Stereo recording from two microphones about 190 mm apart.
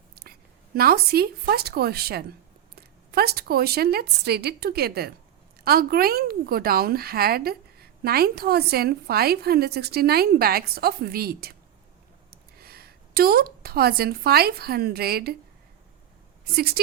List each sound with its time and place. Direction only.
0.2 s a woman's voice: 55° right (ahead or behind)
16.6 s a woman's voice: 55° right (ahead or behind)